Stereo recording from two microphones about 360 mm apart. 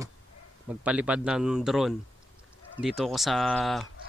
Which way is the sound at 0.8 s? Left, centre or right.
Centre.